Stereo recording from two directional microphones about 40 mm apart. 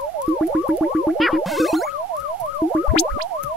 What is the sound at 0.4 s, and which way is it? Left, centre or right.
Music, centre.